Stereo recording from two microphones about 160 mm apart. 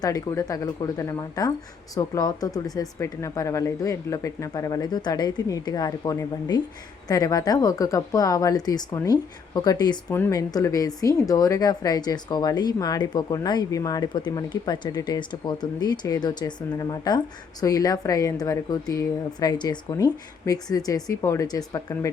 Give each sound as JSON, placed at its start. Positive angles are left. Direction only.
{"t": 0.0, "sound": "speech", "side_deg": 20}